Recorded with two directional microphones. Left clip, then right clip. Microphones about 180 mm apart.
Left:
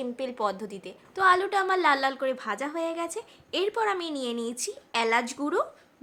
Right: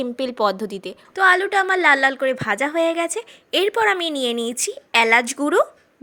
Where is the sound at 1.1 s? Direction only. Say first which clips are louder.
Right 6 dB; 20° right (ahead or behind).